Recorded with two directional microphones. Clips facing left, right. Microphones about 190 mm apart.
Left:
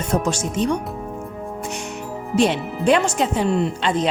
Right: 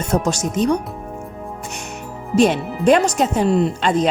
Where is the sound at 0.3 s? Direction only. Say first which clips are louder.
Right 3 dB; 40° right (ahead or behind).